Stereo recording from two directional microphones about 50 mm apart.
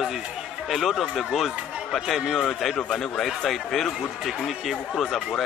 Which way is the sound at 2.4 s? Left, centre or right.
Centre.